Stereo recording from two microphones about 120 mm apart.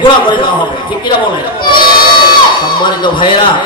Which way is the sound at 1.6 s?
40° left (ahead or behind).